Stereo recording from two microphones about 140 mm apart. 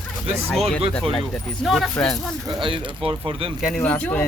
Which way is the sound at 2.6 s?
40° right (ahead or behind).